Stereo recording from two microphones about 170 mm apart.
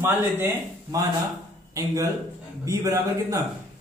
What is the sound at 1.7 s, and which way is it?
Speech, 20° right (ahead or behind).